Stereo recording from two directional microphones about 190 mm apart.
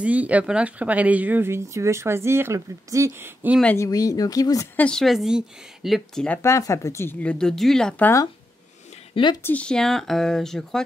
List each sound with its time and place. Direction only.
0.0 s speech: 10° right (ahead or behind)
3.6 s speech: 15° left (ahead or behind)
4.8 s speech: centre (ahead or behind)
9.1 s speech: 25° left (ahead or behind)
9.4 s speech: 10° left (ahead or behind)